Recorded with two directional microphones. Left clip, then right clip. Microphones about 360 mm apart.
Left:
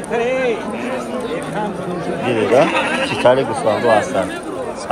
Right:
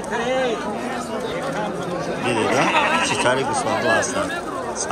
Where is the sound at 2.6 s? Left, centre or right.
Right.